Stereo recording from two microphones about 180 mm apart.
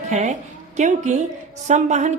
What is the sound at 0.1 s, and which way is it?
A woman's voice, 40° right (ahead or behind).